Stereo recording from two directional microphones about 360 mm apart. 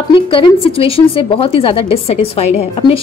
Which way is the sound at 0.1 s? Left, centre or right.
Centre.